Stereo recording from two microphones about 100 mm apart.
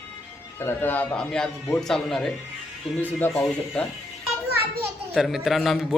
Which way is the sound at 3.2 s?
20° left (ahead or behind).